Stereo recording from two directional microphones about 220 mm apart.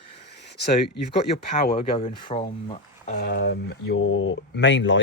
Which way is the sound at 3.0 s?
40° left (ahead or behind).